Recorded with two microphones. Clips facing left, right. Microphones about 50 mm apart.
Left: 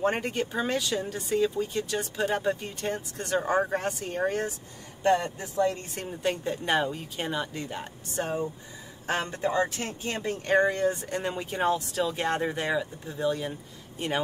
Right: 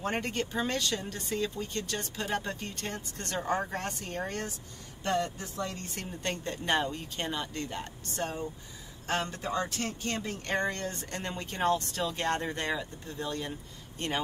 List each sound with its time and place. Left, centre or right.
0.0 s speech: centre